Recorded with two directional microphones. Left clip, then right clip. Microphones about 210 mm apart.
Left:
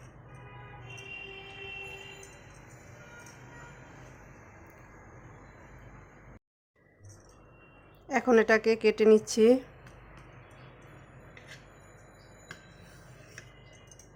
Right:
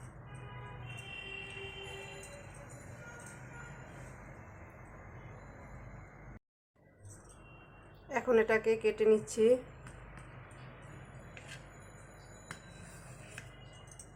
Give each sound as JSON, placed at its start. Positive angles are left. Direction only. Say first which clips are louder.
{"t": 8.0, "sound": "a woman's voice", "louder": "left 5 dB", "side_deg": 40}